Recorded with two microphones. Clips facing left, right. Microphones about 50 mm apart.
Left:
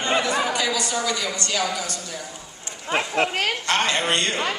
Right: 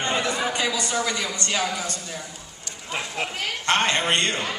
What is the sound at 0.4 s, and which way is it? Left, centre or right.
A man's voice, right.